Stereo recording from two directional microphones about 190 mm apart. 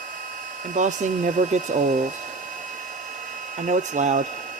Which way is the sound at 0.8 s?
40° right (ahead or behind).